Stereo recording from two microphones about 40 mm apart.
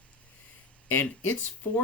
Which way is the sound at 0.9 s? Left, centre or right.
Left.